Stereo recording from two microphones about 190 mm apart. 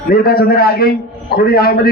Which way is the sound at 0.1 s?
55° left (ahead or behind).